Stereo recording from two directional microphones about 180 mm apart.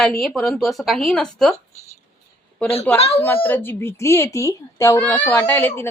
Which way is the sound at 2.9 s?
35° left (ahead or behind).